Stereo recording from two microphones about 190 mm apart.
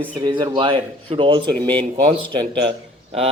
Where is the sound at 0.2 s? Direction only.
25° right (ahead or behind).